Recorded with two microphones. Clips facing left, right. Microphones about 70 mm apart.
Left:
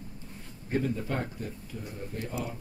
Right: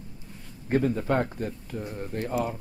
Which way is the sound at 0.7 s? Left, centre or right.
Right.